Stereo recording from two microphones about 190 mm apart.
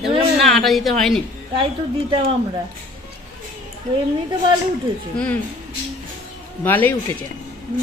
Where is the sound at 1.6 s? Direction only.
25° right (ahead or behind).